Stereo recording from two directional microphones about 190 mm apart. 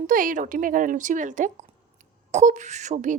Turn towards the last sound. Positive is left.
turn(degrees=-40)  # may be behind; listen again after turning